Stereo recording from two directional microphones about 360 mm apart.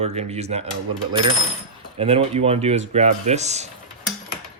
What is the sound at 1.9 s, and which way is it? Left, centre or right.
Speech, centre.